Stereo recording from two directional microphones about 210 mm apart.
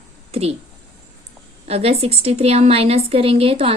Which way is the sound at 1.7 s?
30° right (ahead or behind).